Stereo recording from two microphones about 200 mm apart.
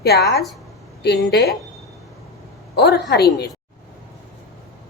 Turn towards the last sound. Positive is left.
turn(degrees=55)  # may be behind; listen again after turning